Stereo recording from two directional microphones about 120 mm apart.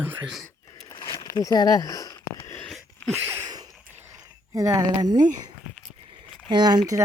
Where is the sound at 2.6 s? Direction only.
5° left (ahead or behind).